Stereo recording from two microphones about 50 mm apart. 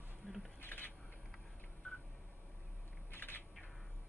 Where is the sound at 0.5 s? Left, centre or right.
Left.